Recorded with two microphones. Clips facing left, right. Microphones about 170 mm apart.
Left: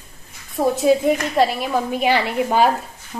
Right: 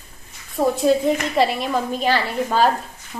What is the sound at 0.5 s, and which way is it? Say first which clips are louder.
A woman's voice: left 1 dB; centre (ahead or behind).